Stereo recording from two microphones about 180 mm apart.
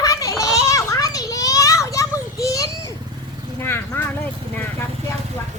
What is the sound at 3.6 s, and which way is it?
Vehicle, 10° left (ahead or behind).